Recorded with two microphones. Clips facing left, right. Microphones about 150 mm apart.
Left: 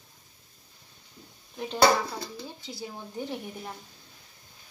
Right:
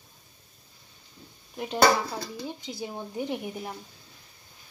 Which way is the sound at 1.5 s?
10° right (ahead or behind).